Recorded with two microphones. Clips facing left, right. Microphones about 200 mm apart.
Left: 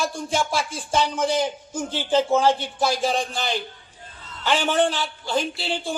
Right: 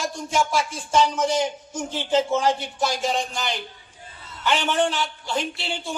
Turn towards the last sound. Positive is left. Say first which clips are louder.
# left 3 dB
turn(degrees=35)  # may be behind; listen again after turning